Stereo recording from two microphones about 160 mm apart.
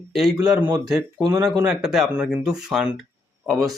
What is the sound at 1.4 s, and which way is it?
Speech, 5° right (ahead or behind).